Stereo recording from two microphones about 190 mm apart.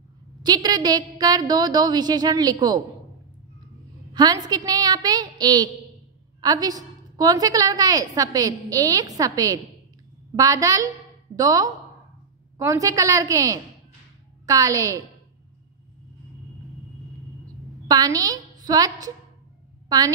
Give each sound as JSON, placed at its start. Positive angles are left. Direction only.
{"t": 0.4, "sound": "a woman's voice", "side_deg": -20}
{"t": 4.1, "sound": "a woman's voice", "side_deg": -20}
{"t": 17.8, "sound": "a woman's voice", "side_deg": -20}